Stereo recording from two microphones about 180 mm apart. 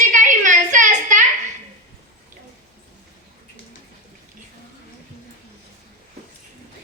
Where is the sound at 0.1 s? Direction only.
45° right (ahead or behind).